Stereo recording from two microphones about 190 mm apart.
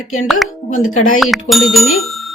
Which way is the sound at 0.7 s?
40° left (ahead or behind).